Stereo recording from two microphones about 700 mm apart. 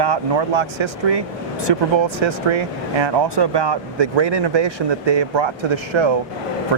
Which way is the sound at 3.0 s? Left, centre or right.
Right.